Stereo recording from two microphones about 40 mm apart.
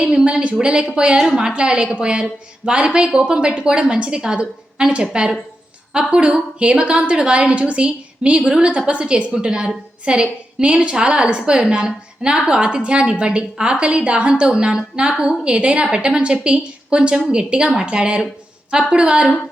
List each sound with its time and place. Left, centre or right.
0.3 s a woman's voice: right
1.2 s a woman's voice: centre